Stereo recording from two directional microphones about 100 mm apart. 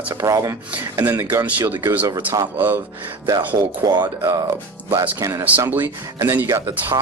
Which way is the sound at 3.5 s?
40° right (ahead or behind).